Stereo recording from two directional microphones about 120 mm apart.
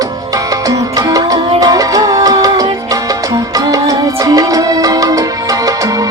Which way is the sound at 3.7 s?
30° right (ahead or behind).